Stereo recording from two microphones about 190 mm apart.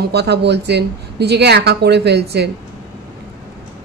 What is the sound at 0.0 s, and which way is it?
A woman's voice, 60° right (ahead or behind).